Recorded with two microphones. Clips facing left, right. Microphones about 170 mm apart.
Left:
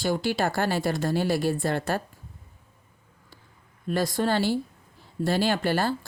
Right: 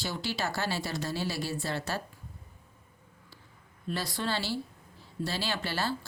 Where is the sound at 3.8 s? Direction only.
45° left (ahead or behind).